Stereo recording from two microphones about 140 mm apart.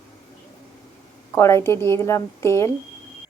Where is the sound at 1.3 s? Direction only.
20° left (ahead or behind).